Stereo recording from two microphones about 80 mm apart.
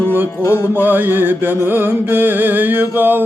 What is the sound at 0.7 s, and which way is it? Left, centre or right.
Music, right.